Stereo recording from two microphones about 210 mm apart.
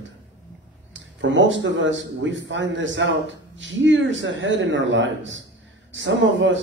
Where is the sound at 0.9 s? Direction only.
65° right (ahead or behind).